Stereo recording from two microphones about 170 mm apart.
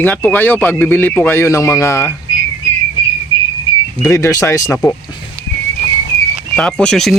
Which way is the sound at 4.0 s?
20° left (ahead or behind).